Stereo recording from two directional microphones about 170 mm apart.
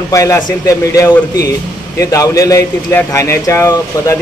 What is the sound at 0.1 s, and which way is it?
A man's voice, 20° left (ahead or behind).